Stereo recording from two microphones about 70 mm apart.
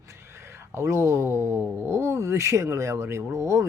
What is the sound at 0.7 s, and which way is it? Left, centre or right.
Speech, right.